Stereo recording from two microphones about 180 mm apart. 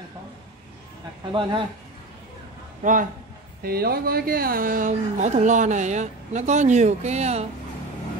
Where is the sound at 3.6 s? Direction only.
60° right (ahead or behind); by 7.4 s 40° right (ahead or behind).